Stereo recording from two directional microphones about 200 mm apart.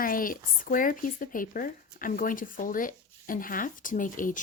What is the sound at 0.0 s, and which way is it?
Speech, 45° left (ahead or behind).